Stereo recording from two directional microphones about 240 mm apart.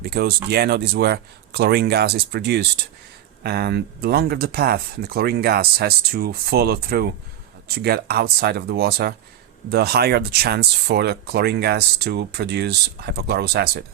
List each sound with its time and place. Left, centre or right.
0.0 s speech: right